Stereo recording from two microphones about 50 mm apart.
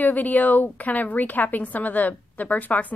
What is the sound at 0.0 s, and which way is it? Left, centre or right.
A woman's voice, left.